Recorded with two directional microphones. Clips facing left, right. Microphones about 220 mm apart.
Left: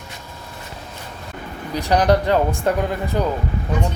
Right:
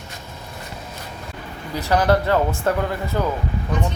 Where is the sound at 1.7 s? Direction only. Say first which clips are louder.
Left 1 dB; 15° left (ahead or behind).